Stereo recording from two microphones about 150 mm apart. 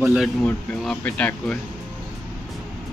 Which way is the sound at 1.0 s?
10° left (ahead or behind).